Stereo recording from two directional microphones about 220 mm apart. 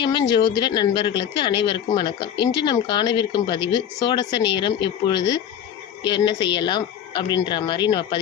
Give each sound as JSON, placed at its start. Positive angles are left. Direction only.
{"t": 0.0, "sound": "speech", "side_deg": 20}